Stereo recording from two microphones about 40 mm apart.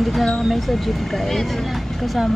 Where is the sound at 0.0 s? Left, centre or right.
Centre.